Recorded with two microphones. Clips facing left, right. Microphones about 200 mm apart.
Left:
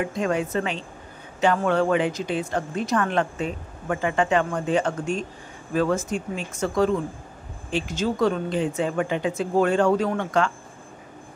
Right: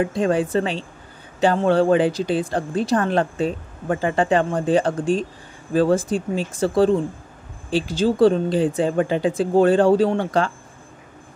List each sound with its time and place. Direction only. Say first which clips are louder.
0.0 s a woman's voice: right 5 dB; 30° right (ahead or behind)